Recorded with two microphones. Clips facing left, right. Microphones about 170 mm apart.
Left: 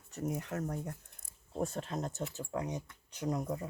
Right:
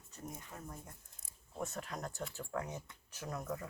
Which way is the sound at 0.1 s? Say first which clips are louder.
Left 12 dB; 75° left (ahead or behind).